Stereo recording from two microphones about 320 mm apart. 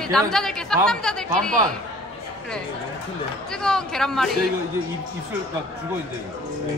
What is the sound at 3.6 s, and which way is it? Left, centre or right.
Speech, centre.